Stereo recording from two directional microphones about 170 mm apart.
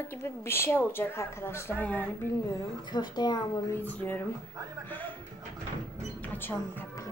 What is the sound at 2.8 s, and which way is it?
Speech, 25° left (ahead or behind).